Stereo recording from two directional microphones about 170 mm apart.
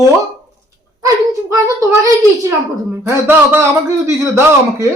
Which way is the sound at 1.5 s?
20° right (ahead or behind).